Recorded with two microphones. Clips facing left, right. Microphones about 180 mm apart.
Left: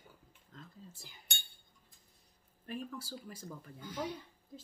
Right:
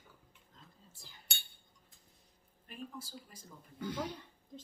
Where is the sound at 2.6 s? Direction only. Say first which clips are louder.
Left 5 dB; 85° left.